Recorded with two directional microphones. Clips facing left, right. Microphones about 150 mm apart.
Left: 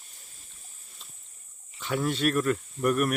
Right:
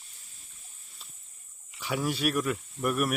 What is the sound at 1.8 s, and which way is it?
Speech, 10° right (ahead or behind).